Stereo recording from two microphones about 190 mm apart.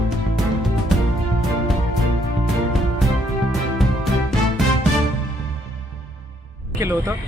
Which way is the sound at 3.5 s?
Centre (ahead or behind).